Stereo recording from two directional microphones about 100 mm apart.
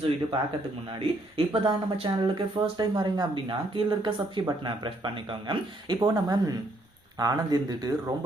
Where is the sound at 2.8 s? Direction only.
45° right (ahead or behind).